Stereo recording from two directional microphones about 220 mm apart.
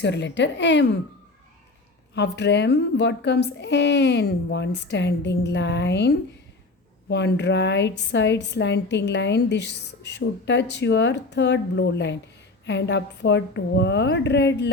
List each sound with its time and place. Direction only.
0.0 s a woman's voice: 55° left (ahead or behind)
2.1 s a woman's voice: 50° left (ahead or behind)